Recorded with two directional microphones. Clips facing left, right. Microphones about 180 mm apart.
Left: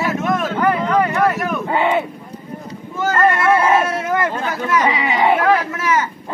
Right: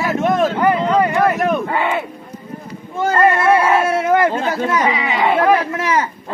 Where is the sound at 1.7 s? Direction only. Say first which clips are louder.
Left 2 dB; 20° left (ahead or behind).